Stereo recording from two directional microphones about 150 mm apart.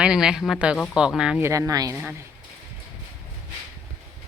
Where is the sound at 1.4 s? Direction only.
20° right (ahead or behind).